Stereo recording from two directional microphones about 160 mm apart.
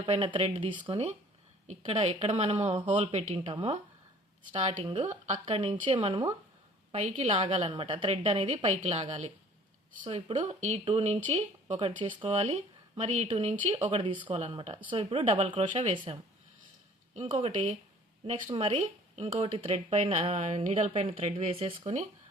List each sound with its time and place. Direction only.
0.0 s speech: 35° right (ahead or behind)
4.5 s speech: 50° right (ahead or behind)
4.8 s speech: 35° right (ahead or behind)
5.2 s speech: 45° right (ahead or behind)
12.4 s speech: 40° right (ahead or behind)
17.2 s speech: 40° right (ahead or behind)